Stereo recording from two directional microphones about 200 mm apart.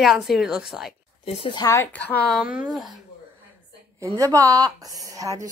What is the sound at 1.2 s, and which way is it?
A woman's voice, 30° left (ahead or behind).